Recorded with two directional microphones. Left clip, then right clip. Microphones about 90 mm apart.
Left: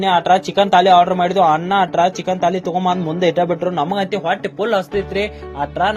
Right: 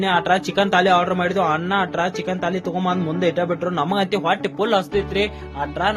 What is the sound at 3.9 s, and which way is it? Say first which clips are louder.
Speech: left 1 dB; centre (ahead or behind).